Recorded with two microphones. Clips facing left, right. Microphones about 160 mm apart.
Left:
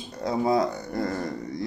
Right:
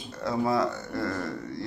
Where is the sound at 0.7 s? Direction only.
35° left (ahead or behind).